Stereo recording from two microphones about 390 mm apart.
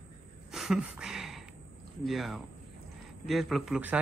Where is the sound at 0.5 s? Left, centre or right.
Centre.